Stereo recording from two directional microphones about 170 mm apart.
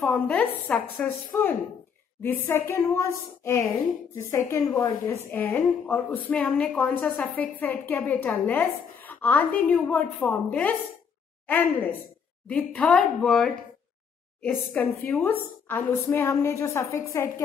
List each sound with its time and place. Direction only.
0.0 s a woman's voice: 10° left (ahead or behind)